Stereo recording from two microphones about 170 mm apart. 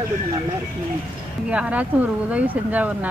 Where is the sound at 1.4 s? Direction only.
5° right (ahead or behind).